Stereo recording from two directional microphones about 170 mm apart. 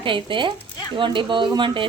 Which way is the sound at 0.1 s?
30° right (ahead or behind).